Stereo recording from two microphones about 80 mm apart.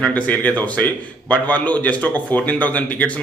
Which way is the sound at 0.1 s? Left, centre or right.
Centre.